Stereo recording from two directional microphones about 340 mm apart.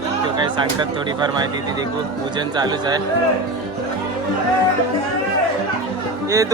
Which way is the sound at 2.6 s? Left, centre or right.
Centre.